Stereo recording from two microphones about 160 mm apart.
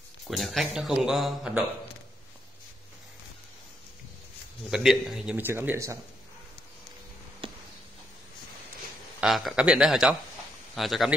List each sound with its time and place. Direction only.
0.3 s speech: centre (ahead or behind)
4.6 s speech: 5° right (ahead or behind)
7.4 s a sound: 30° right (ahead or behind)
9.2 s speech: centre (ahead or behind)